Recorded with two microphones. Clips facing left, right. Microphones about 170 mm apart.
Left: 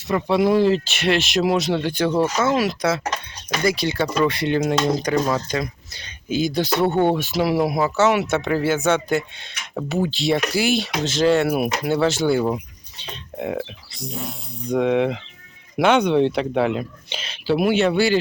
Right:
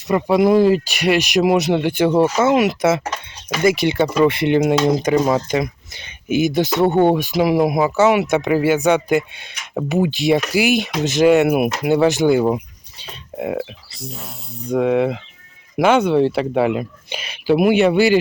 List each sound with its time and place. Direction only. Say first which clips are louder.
0.1 s speech: right 4 dB; 5° right (ahead or behind)
3.0 s a sound: even; 5° right (ahead or behind)
3.6 s speech: right 5 dB; 25° right (ahead or behind)
13.0 s speech: right 2 dB; 5° right (ahead or behind)